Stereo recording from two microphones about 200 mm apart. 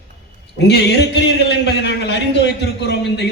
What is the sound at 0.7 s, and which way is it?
A man's voice, 60° left (ahead or behind).